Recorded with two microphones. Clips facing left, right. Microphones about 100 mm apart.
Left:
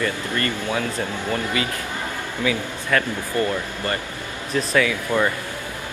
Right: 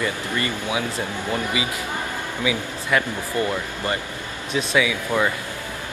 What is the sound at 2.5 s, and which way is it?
Speech, 15° right (ahead or behind).